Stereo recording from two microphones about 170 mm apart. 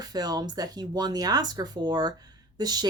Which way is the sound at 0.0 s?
25° right (ahead or behind).